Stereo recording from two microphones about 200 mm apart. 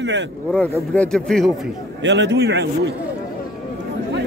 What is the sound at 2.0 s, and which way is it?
Speech, 65° right (ahead or behind).